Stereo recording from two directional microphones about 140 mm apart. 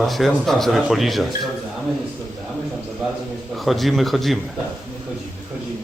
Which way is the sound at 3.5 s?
Centre (ahead or behind).